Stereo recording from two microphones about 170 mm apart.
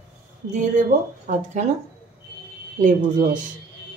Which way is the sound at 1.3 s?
45° right (ahead or behind).